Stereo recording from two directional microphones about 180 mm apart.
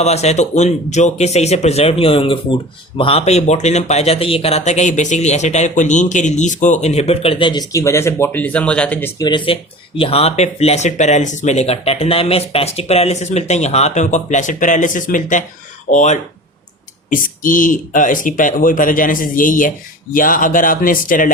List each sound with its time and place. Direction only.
0.0 s speech: 35° left (ahead or behind); by 9.2 s 10° left (ahead or behind)
9.2 s speech: 25° left (ahead or behind); by 21.3 s 50° left (ahead or behind)